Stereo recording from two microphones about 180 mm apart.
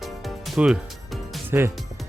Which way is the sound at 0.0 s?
Centre (ahead or behind).